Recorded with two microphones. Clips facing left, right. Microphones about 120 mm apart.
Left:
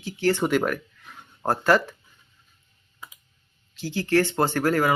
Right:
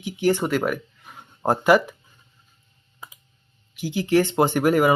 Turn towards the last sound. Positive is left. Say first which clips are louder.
# right 4 dB
turn(degrees=-15)  # may be behind; listen again after turning